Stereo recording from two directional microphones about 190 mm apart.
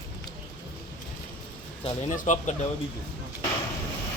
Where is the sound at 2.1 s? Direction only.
40° left (ahead or behind).